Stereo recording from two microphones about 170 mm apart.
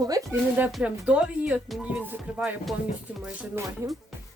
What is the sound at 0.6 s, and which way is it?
Speech, 5° right (ahead or behind).